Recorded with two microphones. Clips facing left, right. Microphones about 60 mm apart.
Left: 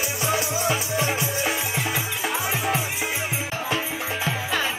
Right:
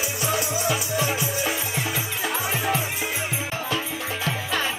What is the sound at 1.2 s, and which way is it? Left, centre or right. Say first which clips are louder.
Music: left 1 dB; centre.